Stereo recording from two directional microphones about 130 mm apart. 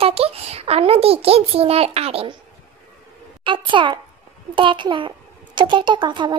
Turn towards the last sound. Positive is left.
turn(degrees=-35)  # may be behind; listen again after turning